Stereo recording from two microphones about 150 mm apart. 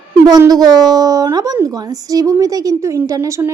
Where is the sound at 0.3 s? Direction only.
25° right (ahead or behind).